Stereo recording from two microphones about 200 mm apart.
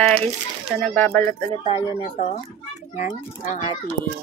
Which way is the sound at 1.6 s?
30° left (ahead or behind).